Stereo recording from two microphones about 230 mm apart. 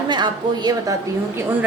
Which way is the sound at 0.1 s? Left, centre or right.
Centre.